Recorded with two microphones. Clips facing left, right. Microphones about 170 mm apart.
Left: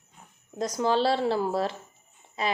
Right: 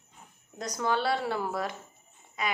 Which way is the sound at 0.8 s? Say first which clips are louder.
Left 4 dB; 25° left (ahead or behind).